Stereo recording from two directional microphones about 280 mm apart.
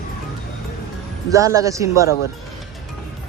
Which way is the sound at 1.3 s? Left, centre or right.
Centre.